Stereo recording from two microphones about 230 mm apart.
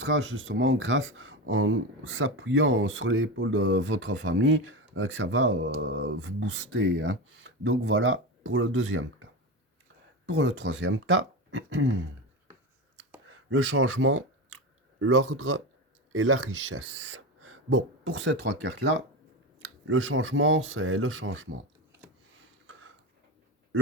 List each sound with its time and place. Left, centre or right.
0.0 s speech: right
10.2 s speech: right
13.2 s speech: right
22.6 s a sound: right